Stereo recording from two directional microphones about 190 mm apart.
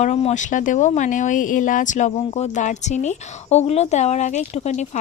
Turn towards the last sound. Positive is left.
turn(degrees=35)  # may be behind; listen again after turning